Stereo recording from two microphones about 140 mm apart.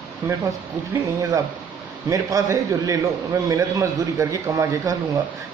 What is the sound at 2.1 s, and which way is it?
Speech, 25° right (ahead or behind).